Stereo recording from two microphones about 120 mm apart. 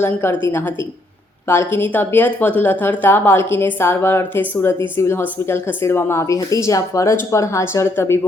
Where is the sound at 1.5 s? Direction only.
20° left (ahead or behind).